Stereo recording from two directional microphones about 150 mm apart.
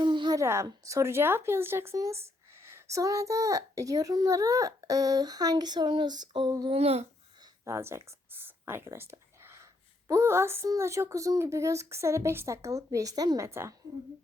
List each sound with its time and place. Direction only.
0.0 s a child's voice: 30° right (ahead or behind)
6.7 s babbling: 45° right (ahead or behind)
7.6 s a sound: 20° right (ahead or behind)
10.1 s a child's voice: 20° right (ahead or behind)